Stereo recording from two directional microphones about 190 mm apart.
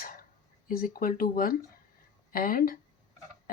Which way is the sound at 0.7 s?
50° left (ahead or behind).